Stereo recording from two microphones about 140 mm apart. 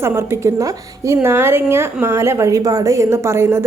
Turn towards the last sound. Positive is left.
turn(degrees=-20)  # may be behind; listen again after turning